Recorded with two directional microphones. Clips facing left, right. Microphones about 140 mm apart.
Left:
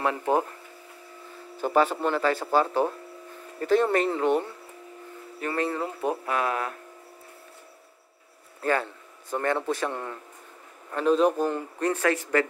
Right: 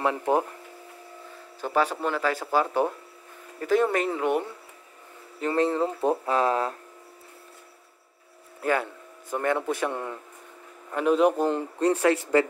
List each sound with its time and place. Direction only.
0.0 s speech: 15° right (ahead or behind)
1.6 s speech: 5° left (ahead or behind)
5.4 s speech: 25° right (ahead or behind)
8.6 s speech: 10° right (ahead or behind)